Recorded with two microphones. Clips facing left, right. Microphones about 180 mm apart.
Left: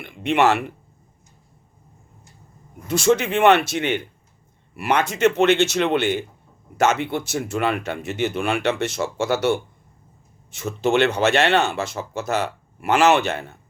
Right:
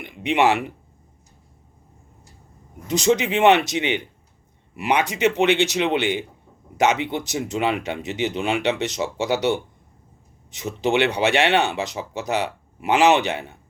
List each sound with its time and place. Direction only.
0.0 s speech: 15° right (ahead or behind)
2.8 s speech: 15° right (ahead or behind)